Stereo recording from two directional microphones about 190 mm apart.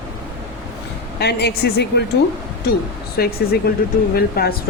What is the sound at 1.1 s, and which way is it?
Speech, 60° left (ahead or behind).